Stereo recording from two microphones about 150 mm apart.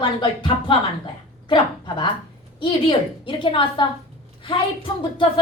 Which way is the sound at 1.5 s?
35° left (ahead or behind).